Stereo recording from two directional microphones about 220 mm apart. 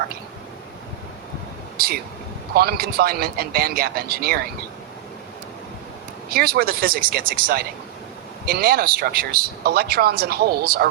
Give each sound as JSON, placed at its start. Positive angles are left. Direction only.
{"t": 1.8, "sound": "speech", "side_deg": -45}
{"t": 6.3, "sound": "speech", "side_deg": -45}